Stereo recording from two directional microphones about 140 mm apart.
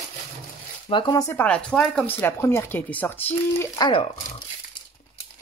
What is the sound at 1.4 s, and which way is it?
Speech, 5° left (ahead or behind).